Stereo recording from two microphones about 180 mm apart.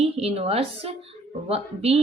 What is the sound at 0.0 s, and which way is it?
A woman's voice, 35° right (ahead or behind).